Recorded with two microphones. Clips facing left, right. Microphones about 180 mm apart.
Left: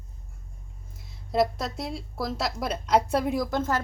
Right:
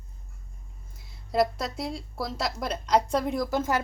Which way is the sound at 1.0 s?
Centre (ahead or behind).